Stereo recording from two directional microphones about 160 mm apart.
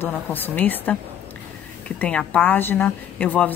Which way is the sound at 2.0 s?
5° left (ahead or behind).